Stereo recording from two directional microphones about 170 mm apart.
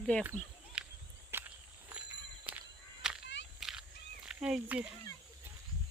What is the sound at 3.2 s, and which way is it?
Whip, 90° left.